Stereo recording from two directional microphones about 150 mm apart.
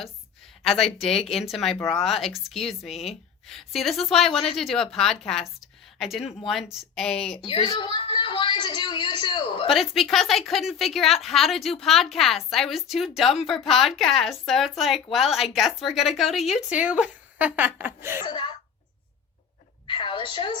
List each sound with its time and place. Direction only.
0.9 s a woman's voice: centre (ahead or behind)
7.4 s a sound: 35° left (ahead or behind)
9.6 s a woman's voice: centre (ahead or behind); by 18.2 s 15° right (ahead or behind)
18.2 s a woman's voice: 30° left (ahead or behind)
19.9 s a woman's voice: 35° left (ahead or behind)